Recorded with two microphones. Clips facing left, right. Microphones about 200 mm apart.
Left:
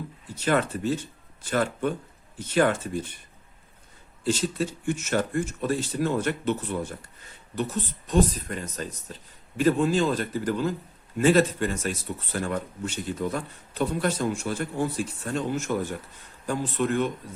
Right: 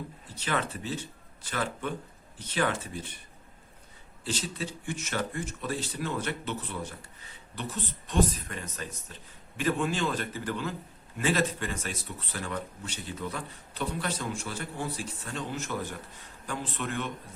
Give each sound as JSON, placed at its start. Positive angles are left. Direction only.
{"t": 0.3, "sound": "speech", "side_deg": 45}
{"t": 4.2, "sound": "speech", "side_deg": 45}